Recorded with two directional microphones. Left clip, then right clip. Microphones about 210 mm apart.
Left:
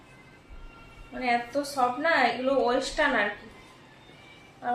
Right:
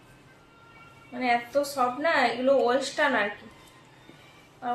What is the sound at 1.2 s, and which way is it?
A woman's voice, 10° right (ahead or behind).